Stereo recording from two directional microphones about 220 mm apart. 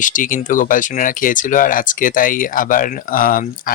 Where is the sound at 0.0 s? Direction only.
35° left (ahead or behind).